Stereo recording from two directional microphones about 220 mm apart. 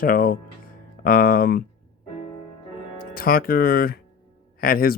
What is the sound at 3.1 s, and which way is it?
Speech, 40° left (ahead or behind).